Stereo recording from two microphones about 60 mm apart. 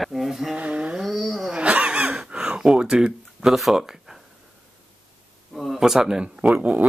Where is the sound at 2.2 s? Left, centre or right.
Centre.